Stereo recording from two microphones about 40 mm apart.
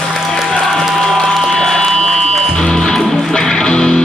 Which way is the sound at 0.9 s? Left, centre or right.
Centre.